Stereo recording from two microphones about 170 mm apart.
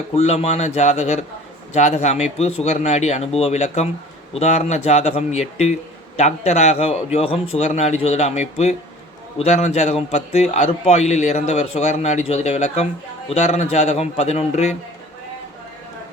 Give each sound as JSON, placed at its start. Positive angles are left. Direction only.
{"t": 0.1, "sound": "a man's voice", "side_deg": 40}